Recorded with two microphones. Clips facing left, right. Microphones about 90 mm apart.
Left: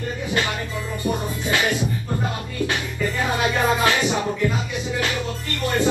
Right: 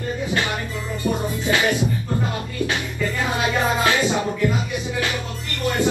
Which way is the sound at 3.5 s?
20° right (ahead or behind).